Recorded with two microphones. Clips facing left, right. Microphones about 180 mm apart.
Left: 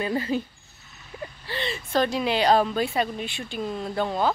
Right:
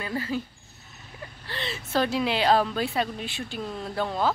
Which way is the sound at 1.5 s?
Centre (ahead or behind).